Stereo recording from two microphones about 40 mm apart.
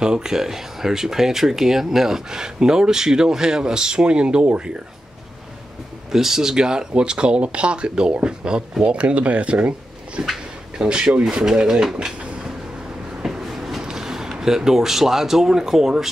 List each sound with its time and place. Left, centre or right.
0.0 s speech: centre
6.1 s speech: centre
13.2 s a sound: centre